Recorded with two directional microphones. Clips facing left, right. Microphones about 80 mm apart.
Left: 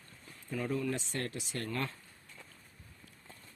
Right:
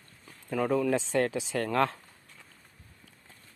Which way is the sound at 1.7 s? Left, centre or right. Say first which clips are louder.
Right 12 dB; right.